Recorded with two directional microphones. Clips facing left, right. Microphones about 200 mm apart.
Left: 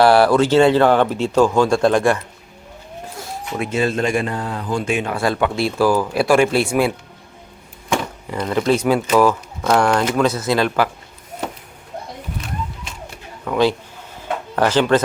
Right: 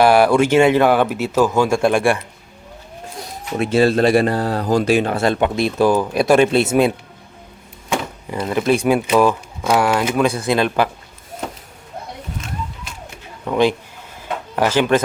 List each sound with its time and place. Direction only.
0.0 s speech: 15° right (ahead or behind)
3.6 s speech: 35° right (ahead or behind)
8.4 s speech: 20° right (ahead or behind)
13.4 s speech: 15° right (ahead or behind)